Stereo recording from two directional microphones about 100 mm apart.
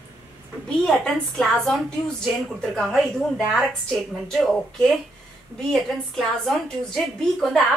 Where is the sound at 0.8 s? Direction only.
5° left (ahead or behind).